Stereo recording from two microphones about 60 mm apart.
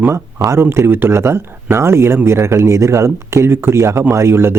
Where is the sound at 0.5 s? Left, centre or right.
Right.